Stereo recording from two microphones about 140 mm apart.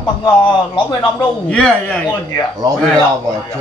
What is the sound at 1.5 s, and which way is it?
Speech, 5° left (ahead or behind).